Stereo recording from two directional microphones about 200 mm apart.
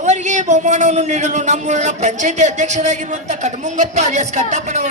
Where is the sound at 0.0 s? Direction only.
35° right (ahead or behind).